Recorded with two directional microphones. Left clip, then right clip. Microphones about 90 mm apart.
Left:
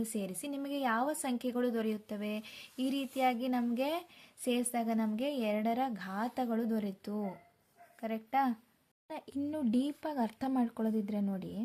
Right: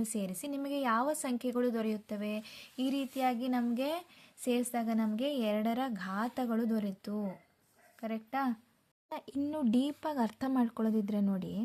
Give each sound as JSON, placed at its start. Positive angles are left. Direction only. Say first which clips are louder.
{"t": 0.0, "sound": "a woman's voice", "louder": "right 1 dB", "side_deg": -20}
{"t": 9.0, "sound": "speech", "louder": "right 2 dB", "side_deg": -25}